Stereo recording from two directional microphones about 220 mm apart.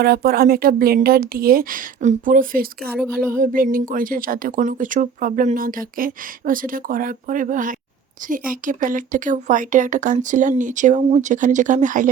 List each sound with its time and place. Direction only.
0.0 s speech: 45° right (ahead or behind)